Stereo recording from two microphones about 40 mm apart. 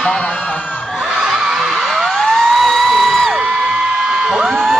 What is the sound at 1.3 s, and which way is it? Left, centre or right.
Music, centre.